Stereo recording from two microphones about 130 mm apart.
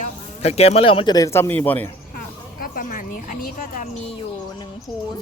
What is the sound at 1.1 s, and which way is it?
Speech, 25° left (ahead or behind).